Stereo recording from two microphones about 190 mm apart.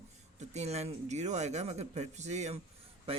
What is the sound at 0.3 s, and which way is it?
Speech, 35° right (ahead or behind).